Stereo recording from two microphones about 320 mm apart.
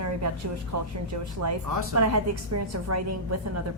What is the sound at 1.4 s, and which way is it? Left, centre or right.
A woman's voice, right.